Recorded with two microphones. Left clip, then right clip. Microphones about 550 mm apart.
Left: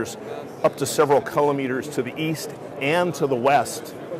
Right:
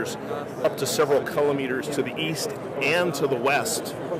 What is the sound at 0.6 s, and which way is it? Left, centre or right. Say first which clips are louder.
Speech: left 3 dB; left.